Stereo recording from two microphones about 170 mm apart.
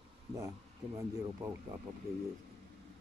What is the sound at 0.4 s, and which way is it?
Speech, 20° right (ahead or behind).